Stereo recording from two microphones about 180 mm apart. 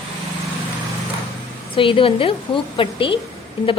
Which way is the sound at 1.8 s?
30° left (ahead or behind).